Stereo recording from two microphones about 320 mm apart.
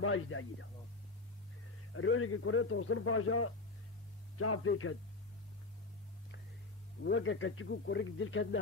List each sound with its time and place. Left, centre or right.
0.0 s speech: left
2.0 s speech: left
7.0 s speech: left